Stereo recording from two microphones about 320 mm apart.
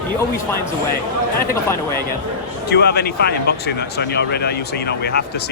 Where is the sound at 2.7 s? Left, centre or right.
Left.